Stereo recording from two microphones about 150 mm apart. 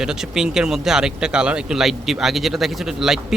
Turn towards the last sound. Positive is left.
turn(degrees=-5)  # may be behind; listen again after turning